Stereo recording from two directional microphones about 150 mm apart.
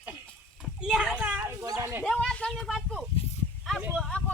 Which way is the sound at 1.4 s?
20° right (ahead or behind).